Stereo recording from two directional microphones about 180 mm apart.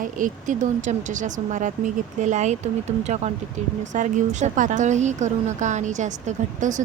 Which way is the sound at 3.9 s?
40° right (ahead or behind).